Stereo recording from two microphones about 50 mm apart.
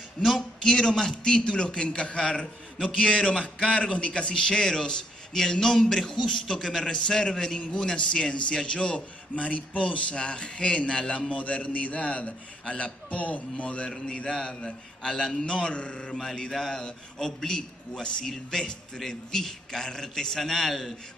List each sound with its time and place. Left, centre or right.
0.2 s speech: centre
0.7 s a man's voice: centre
13.8 s a man's voice: centre